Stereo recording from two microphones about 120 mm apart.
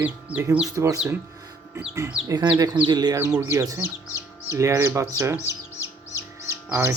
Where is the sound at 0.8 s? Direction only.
25° right (ahead or behind).